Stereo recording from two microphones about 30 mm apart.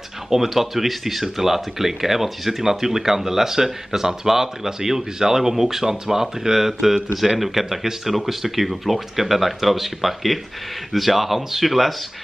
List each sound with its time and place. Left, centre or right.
0.3 s speech: centre